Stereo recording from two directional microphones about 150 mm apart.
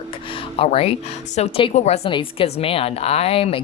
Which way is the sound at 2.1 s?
35° left (ahead or behind).